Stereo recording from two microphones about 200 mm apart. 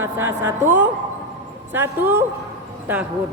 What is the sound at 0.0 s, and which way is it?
A woman's voice, 10° right (ahead or behind).